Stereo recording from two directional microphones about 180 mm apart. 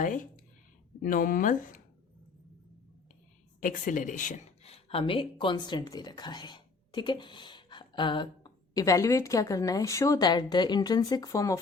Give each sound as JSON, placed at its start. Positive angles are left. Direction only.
{"t": 0.0, "sound": "speech", "side_deg": 45}
{"t": 3.6, "sound": "speech", "side_deg": 45}